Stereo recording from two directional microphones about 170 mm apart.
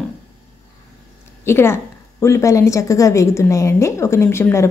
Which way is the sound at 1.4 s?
15° left (ahead or behind).